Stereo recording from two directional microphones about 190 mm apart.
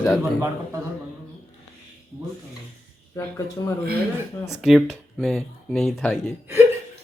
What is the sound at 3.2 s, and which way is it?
Speech, 15° left (ahead or behind).